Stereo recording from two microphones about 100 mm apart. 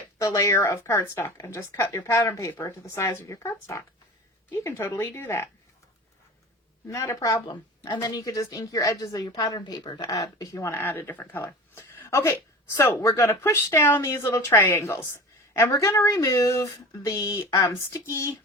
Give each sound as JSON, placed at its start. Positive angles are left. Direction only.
{"t": 0.2, "sound": "speech", "side_deg": 30}
{"t": 6.8, "sound": "a woman's voice", "side_deg": 30}